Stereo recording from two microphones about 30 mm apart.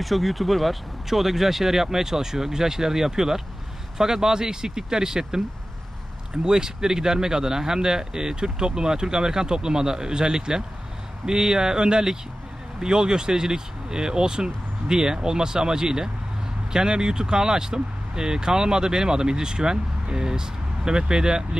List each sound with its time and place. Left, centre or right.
0.0 s speech: centre; by 21.6 s right